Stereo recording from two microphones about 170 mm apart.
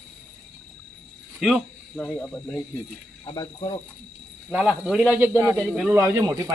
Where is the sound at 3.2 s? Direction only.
30° left (ahead or behind).